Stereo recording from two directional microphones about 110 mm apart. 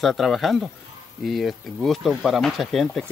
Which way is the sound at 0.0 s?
Centre (ahead or behind).